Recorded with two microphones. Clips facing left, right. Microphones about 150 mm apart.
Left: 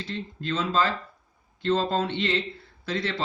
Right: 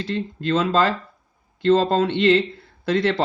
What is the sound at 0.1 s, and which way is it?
Speech, 75° right (ahead or behind).